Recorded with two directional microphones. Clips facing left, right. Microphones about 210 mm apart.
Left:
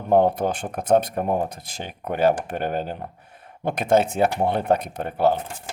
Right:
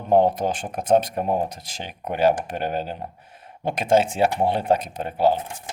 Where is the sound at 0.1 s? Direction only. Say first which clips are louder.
Even; 55° left (ahead or behind).